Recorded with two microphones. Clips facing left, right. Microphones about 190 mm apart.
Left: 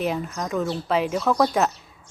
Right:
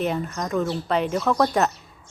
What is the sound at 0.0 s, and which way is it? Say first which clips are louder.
Speech: right 1 dB; centre (ahead or behind).